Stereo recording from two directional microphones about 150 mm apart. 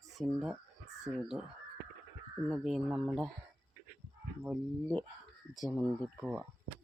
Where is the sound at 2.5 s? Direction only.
Centre (ahead or behind).